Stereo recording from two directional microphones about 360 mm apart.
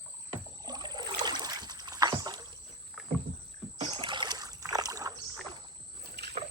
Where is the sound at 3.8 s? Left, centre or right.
Centre.